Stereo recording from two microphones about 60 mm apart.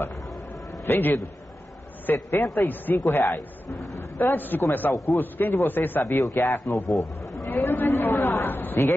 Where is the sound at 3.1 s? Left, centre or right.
Left.